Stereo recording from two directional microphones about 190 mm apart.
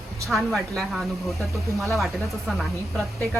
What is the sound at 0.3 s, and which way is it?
Speech, centre (ahead or behind).